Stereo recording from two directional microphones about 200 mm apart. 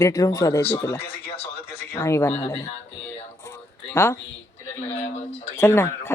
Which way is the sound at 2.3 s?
30° left (ahead or behind).